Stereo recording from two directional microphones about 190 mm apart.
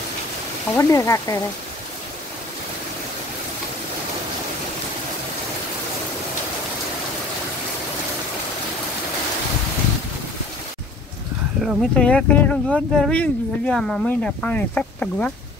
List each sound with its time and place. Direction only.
0.7 s speech: 15° left (ahead or behind)
11.6 s speech: 5° left (ahead or behind)